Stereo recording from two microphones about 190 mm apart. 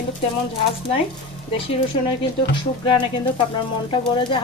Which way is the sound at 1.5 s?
30° left (ahead or behind).